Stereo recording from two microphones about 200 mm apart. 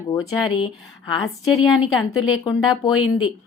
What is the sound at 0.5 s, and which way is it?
Speech, 25° left (ahead or behind).